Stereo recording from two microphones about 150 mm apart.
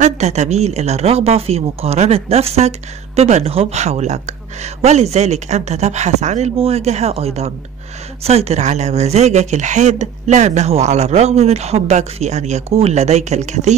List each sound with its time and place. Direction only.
0.0 s speech: 50° right (ahead or behind)